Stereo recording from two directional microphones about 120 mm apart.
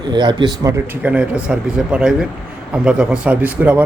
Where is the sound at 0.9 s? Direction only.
10° right (ahead or behind).